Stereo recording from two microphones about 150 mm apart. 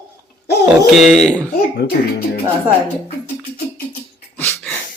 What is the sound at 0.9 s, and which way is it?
Speech, centre (ahead or behind).